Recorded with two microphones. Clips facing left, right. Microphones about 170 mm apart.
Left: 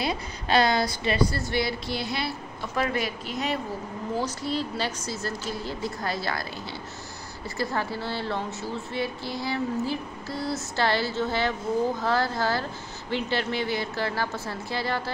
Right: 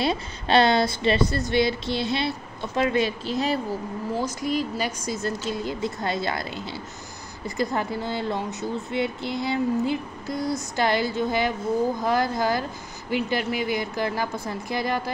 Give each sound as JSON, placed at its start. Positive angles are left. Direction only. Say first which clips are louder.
{"t": 0.0, "sound": "a woman's voice", "louder": "right 4 dB", "side_deg": -25}
{"t": 4.2, "sound": "a woman's voice", "louder": "right 3 dB", "side_deg": -15}